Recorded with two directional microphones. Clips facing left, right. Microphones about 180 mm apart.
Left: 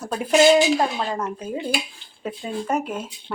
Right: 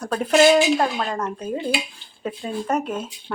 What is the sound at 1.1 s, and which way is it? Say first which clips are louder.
Speech: right 1 dB; 10° left (ahead or behind).